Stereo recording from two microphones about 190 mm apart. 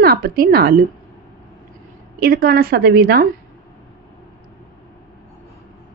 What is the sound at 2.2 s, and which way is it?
Speech, 50° right (ahead or behind).